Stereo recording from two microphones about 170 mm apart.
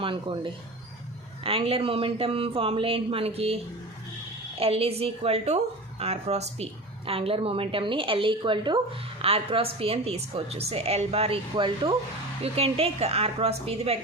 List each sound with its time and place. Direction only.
0.0 s a woman's voice: 30° right (ahead or behind)